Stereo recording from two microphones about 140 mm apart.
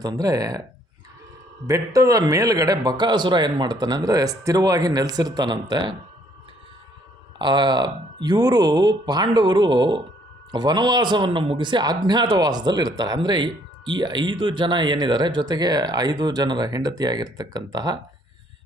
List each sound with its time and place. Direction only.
0.0 s a man's voice: 25° right (ahead or behind)
1.6 s a man's voice: 25° right (ahead or behind)
7.3 s speech: 30° right (ahead or behind)